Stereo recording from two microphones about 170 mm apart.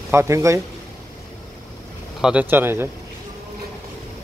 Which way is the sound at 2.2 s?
10° right (ahead or behind).